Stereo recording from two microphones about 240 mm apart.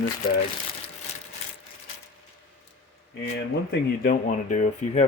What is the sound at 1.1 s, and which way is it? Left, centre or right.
Ratchet, left.